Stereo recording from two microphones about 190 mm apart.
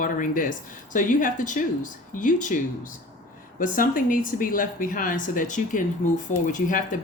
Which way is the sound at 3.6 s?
45° left (ahead or behind).